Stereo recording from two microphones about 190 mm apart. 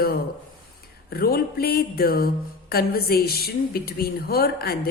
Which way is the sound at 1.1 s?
55° left (ahead or behind).